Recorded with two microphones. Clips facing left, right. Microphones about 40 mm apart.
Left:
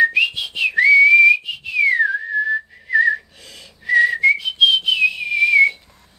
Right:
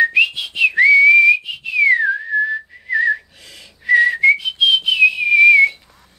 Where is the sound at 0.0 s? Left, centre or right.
Centre.